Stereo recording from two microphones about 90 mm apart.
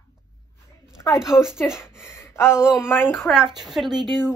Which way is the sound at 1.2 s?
5° right (ahead or behind).